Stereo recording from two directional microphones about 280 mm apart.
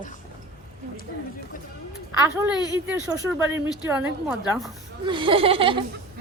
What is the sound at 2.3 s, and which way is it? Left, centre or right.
Speech, centre.